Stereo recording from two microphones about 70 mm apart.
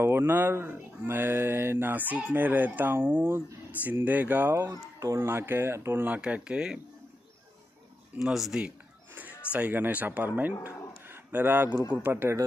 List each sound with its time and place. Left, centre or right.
0.0 s speech: right
4.6 s speech: right; by 6.8 s centre
8.2 s speech: centre
9.1 s a sound: right
9.5 s speech: right
10.6 s a sound: right
12.0 s speech: right